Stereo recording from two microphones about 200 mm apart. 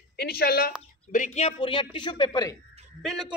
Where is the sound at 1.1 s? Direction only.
35° left (ahead or behind); by 2.5 s 20° left (ahead or behind).